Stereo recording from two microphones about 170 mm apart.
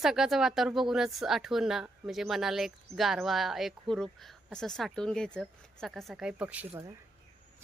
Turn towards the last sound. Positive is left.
turn(degrees=-10)  # may be behind; listen again after turning